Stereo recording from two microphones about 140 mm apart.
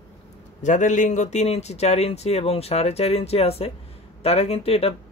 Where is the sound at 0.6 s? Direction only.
60° left (ahead or behind).